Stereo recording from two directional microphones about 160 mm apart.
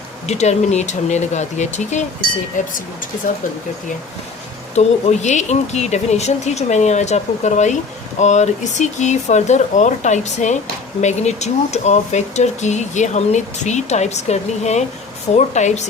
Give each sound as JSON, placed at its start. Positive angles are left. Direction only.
{"t": 0.3, "sound": "speech", "side_deg": 45}
{"t": 4.7, "sound": "speech", "side_deg": 45}